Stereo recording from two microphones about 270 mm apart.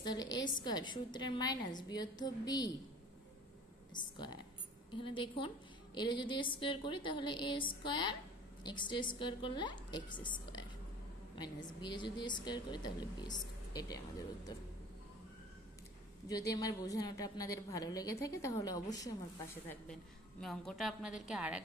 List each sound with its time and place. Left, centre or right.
0.0 s a woman's voice: centre
3.9 s a woman's voice: centre
16.3 s a woman's voice: centre